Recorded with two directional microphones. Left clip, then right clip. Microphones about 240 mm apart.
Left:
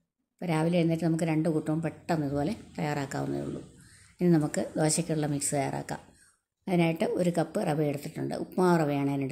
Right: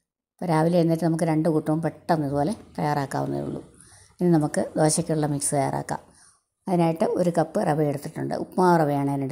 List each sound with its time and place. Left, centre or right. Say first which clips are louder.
0.4 s a woman's voice: right 7 dB; centre